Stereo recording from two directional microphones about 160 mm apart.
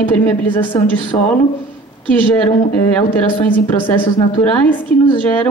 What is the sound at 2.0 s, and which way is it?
A woman's voice, 10° left (ahead or behind).